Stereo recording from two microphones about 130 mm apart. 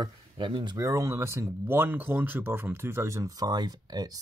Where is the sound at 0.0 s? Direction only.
35° right (ahead or behind).